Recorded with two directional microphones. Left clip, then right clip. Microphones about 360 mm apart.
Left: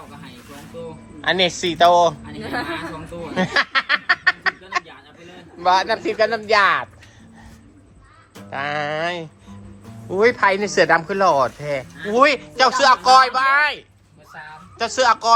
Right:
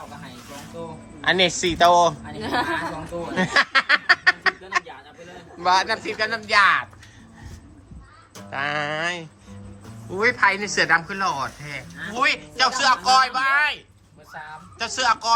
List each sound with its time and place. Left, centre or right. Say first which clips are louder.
1.2 s speech: left 1 dB; centre
3.3 s snicker: even; centre
5.6 s speech: left 3 dB; centre
8.4 s speech: left 2 dB; centre